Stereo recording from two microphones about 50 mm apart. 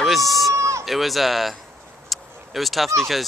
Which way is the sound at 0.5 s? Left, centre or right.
Right.